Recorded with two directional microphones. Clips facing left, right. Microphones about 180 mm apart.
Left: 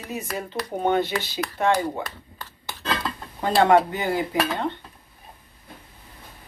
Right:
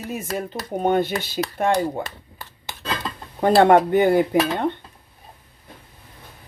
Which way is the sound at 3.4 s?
50° right (ahead or behind).